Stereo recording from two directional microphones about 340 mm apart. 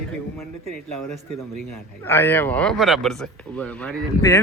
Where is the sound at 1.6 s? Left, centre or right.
Centre.